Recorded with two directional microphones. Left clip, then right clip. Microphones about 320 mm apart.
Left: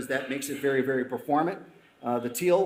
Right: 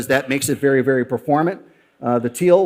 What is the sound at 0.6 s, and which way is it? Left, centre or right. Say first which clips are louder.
A man's voice: right 9 dB; right.